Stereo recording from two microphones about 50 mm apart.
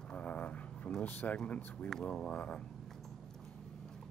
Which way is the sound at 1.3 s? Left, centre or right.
Left.